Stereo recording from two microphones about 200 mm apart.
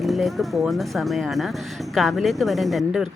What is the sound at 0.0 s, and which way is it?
Speech, centre (ahead or behind).